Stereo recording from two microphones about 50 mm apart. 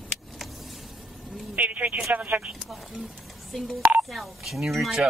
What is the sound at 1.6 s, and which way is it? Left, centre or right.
Vehicle, right.